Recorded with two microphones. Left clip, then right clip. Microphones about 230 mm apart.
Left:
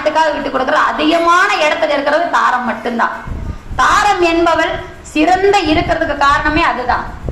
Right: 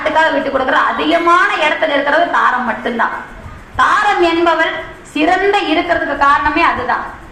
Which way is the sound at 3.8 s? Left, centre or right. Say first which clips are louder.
Even; left.